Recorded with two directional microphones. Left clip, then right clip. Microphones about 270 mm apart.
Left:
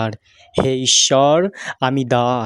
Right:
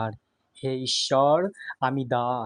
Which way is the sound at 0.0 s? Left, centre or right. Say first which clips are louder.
Left 8 dB; left.